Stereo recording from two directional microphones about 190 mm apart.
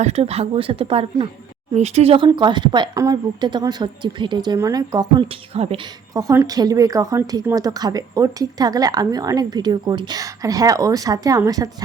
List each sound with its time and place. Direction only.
0.0 s a woman's voice: 35° right (ahead or behind); by 11.7 s 20° right (ahead or behind)